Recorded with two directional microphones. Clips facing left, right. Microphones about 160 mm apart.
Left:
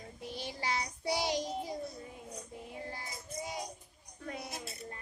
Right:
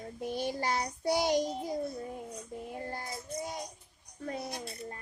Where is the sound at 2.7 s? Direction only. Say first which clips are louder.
Right 4 dB; 50° right (ahead or behind).